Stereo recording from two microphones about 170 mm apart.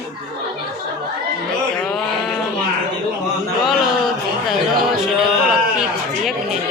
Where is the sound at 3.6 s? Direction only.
Centre (ahead or behind).